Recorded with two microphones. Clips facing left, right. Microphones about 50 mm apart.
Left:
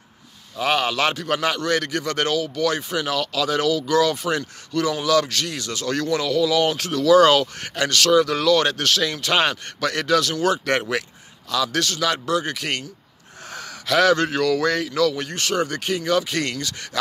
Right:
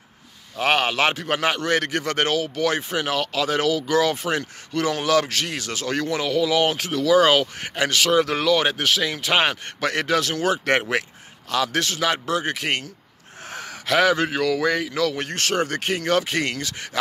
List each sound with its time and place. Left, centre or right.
0.6 s a man's voice: right
8.5 s a man's voice: centre
13.5 s a sound: right
14.0 s speech: centre
15.0 s a man's voice: right
16.3 s a man's voice: right